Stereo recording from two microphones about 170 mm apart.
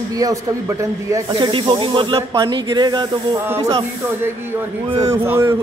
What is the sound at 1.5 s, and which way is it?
A man's voice, 30° right (ahead or behind).